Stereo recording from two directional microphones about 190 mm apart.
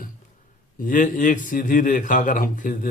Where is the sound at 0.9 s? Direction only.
45° left (ahead or behind).